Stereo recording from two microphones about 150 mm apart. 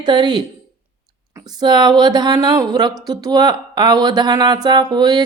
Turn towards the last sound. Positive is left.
turn(degrees=-25)  # may be behind; listen again after turning